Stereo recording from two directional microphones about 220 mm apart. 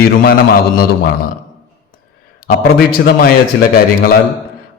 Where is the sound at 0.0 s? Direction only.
40° left (ahead or behind).